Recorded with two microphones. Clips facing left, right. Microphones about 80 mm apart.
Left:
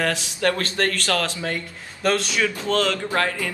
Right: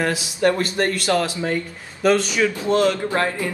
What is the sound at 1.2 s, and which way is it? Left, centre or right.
Speech, centre.